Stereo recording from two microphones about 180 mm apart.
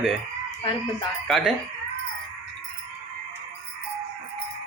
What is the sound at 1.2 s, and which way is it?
Speech, centre (ahead or behind).